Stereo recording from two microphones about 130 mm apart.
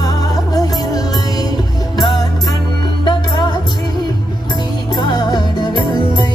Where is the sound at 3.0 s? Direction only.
35° left (ahead or behind).